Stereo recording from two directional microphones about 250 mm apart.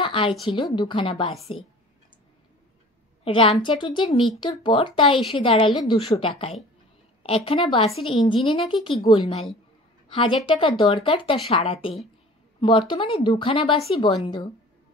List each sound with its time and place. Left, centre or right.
0.0 s speech: left
3.3 s a woman's voice: left